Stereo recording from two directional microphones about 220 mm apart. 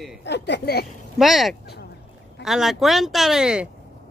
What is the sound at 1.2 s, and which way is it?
Speech, centre (ahead or behind).